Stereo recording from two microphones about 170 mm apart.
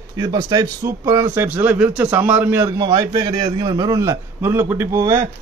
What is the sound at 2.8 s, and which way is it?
A man's voice, 25° right (ahead or behind).